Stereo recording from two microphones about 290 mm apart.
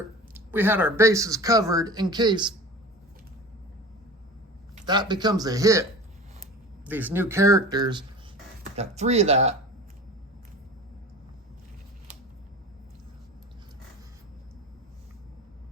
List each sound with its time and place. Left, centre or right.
0.3 s speech: centre
4.7 s speech: centre
6.8 s speech: centre; by 9.6 s right